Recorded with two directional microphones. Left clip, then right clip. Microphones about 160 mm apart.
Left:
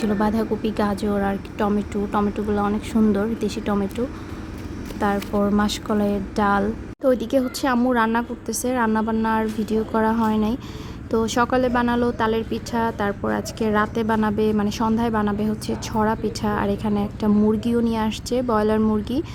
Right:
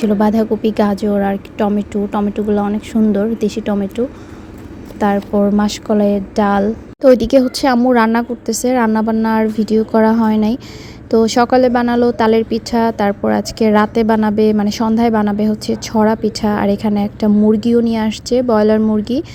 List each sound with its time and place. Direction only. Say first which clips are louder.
0.0 s a woman's voice: right 8 dB; 30° right (ahead or behind)